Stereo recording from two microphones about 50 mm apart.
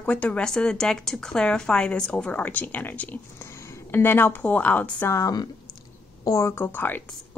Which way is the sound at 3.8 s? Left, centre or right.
Left.